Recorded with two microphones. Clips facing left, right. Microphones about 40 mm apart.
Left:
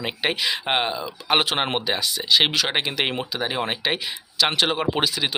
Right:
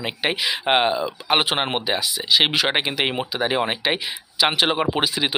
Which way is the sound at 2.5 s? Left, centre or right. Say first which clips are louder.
Right 2 dB; centre.